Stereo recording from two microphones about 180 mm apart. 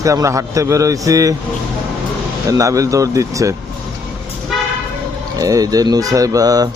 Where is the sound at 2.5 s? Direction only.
20° right (ahead or behind).